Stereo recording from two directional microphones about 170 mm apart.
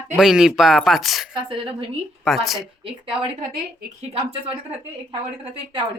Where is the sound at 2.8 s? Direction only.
30° right (ahead or behind).